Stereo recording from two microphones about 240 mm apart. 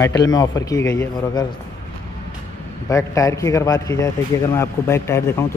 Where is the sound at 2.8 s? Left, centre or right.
Centre.